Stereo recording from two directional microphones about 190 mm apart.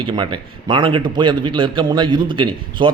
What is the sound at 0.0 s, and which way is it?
A man's voice, 25° right (ahead or behind).